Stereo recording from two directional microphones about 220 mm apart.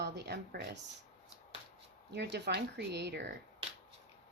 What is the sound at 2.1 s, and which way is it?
Speech, 50° right (ahead or behind).